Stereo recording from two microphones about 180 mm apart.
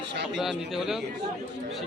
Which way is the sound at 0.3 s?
Centre (ahead or behind).